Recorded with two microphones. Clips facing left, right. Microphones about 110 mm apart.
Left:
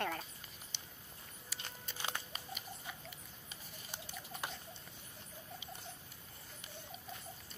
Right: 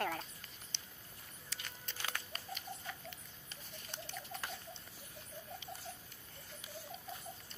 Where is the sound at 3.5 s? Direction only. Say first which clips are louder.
Right 1 dB; 10° left (ahead or behind).